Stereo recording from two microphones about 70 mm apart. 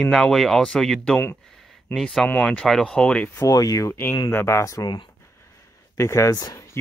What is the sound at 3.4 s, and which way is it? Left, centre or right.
Speech, left.